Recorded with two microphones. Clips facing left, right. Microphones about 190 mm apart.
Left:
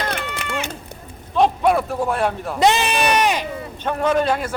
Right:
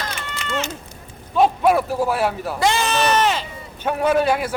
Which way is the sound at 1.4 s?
5° right (ahead or behind).